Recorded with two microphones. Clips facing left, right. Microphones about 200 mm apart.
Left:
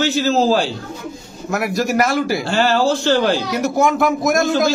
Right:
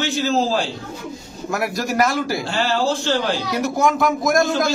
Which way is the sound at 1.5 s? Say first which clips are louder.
Left 4 dB; centre (ahead or behind).